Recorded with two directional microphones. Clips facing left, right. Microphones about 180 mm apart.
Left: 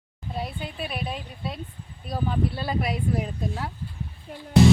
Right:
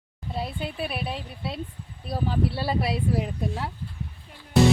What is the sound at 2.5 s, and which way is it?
Speech, 30° right (ahead or behind).